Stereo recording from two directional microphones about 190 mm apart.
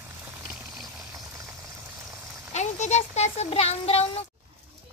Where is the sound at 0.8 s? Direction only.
20° right (ahead or behind).